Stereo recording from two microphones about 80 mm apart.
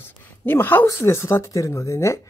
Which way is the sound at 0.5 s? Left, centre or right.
Left.